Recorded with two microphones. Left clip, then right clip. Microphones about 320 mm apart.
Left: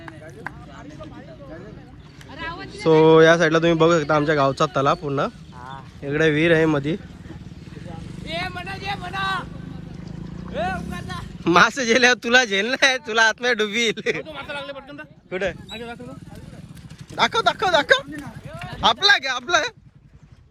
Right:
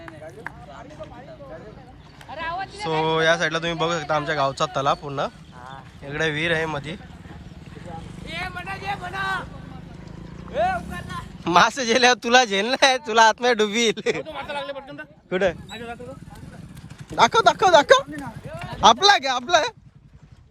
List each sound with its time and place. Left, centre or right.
2.3 s a sound: centre
2.8 s a man's voice: centre
8.4 s vehicle: centre
10.5 s speech: left
11.4 s a man's voice: centre
14.3 s a sound: right
17.2 s speech: right